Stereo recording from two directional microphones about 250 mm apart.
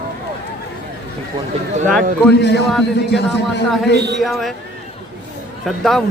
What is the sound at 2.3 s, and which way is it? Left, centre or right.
Speech, left.